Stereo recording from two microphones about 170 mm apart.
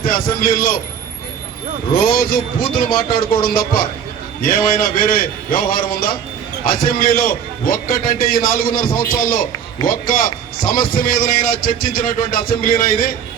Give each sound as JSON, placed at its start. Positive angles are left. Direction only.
{"t": 0.0, "sound": "a man's voice", "side_deg": 60}
{"t": 2.0, "sound": "a man's voice", "side_deg": 60}